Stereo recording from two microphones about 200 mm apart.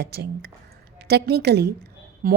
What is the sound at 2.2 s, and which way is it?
Speech, 45° right (ahead or behind).